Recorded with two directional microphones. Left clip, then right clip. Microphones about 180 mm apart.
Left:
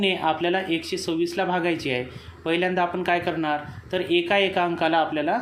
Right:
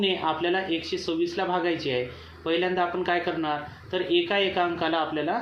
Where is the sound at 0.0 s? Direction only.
45° left (ahead or behind).